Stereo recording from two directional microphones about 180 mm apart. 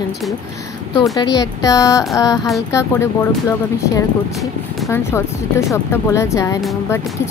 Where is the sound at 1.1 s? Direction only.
20° left (ahead or behind).